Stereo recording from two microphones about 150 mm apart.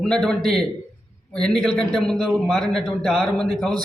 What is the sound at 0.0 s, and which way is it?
A man's voice, 5° left (ahead or behind).